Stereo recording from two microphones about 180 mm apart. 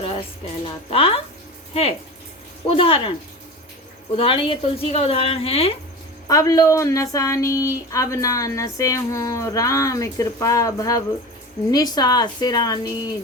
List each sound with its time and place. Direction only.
0.0 s a woman's voice: 30° left (ahead or behind)
4.2 s a woman's voice: 30° left (ahead or behind)
6.2 s a woman's voice: 20° left (ahead or behind)